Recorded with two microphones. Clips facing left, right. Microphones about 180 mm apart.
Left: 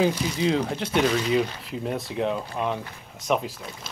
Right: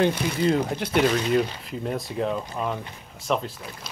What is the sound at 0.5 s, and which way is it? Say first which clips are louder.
Speech: right 1 dB; 5° right (ahead or behind).